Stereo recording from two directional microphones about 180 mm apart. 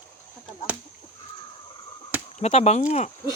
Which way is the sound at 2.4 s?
35° left (ahead or behind).